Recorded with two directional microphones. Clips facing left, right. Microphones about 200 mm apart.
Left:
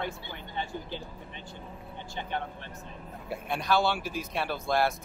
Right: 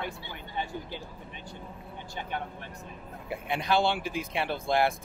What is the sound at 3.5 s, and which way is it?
Speech, 20° right (ahead or behind).